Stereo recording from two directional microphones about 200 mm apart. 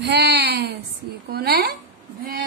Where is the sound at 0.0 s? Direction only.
55° right (ahead or behind).